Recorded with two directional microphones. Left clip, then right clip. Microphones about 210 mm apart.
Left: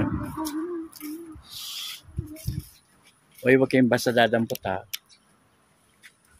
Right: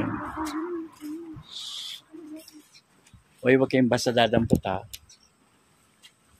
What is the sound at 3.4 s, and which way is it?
Speech, 5° left (ahead or behind).